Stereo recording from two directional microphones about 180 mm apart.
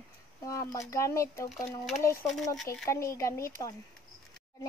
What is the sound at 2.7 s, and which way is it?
Speech, 15° left (ahead or behind).